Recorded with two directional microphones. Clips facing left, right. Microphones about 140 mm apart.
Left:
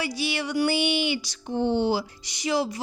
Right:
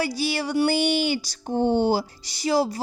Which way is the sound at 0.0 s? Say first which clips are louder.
Right 3 dB; 40° right (ahead or behind).